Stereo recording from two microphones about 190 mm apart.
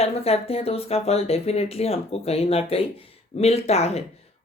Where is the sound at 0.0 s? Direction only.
30° left (ahead or behind).